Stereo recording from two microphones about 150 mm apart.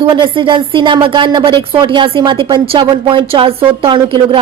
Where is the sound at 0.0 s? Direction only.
30° right (ahead or behind).